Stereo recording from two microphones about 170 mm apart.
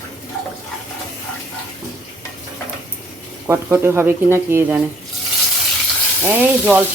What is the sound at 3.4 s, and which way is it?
Speech, 15° right (ahead or behind).